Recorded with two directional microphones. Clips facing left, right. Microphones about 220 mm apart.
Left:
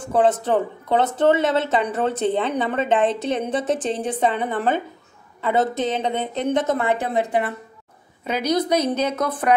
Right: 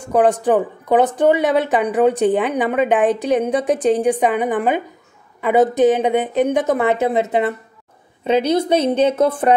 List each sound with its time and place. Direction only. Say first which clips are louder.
0.0 s a woman's voice: right 4 dB; 15° right (ahead or behind)